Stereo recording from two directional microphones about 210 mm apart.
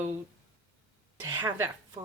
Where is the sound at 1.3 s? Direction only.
15° right (ahead or behind).